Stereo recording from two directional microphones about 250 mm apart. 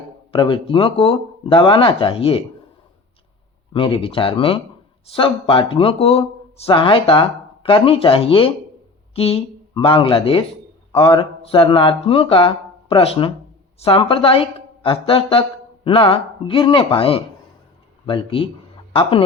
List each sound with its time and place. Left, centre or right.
0.3 s speech: left
3.7 s speech: centre